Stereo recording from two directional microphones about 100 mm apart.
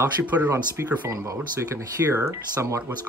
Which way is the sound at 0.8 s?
25° right (ahead or behind).